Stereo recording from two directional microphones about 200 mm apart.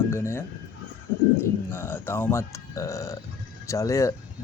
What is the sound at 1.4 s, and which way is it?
Speech, 10° left (ahead or behind).